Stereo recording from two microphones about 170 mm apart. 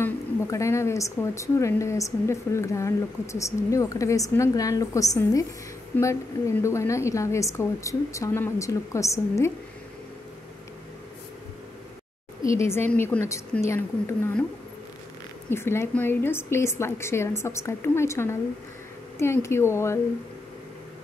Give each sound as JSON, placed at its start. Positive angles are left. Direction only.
{"t": 0.0, "sound": "a woman's voice", "side_deg": 15}
{"t": 12.4, "sound": "a woman's voice", "side_deg": 15}
{"t": 15.5, "sound": "a woman's voice", "side_deg": 15}